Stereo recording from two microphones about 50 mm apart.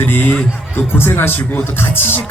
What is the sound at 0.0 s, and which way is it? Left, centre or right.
A man's voice, left.